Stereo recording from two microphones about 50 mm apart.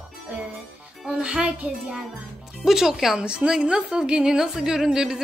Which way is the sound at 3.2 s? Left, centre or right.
Centre.